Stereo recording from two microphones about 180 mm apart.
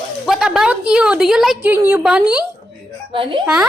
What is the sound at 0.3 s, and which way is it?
A woman's voice, 5° right (ahead or behind).